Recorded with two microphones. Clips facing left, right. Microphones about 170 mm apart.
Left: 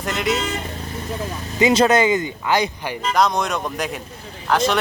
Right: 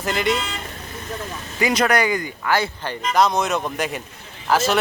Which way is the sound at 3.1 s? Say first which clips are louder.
Right 1 dB; centre (ahead or behind).